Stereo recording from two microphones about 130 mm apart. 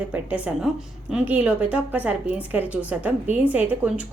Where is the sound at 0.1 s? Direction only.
10° right (ahead or behind).